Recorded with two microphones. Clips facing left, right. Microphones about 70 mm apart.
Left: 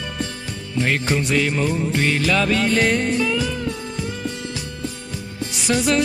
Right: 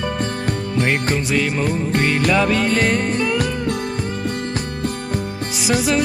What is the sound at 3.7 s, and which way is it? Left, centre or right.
Music, right.